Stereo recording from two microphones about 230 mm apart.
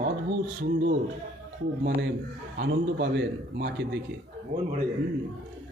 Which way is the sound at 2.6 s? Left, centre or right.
Right.